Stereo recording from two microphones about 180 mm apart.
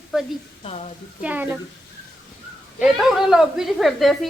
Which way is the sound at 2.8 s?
Centre (ahead or behind).